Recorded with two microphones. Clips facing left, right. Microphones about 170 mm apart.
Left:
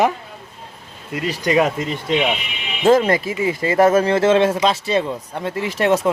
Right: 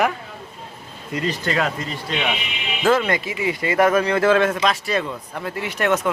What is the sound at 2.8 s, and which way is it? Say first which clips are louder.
Speech: left 5 dB; 35° left (ahead or behind).